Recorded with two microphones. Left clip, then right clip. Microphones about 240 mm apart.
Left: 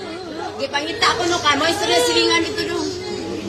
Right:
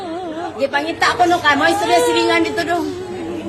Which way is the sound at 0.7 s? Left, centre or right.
Right.